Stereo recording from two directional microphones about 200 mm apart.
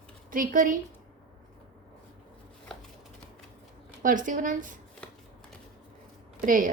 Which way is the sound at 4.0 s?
40° right (ahead or behind).